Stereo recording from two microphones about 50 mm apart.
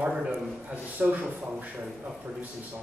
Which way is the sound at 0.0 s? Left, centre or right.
Centre.